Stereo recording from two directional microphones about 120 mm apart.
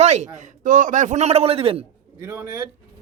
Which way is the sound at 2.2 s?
25° right (ahead or behind).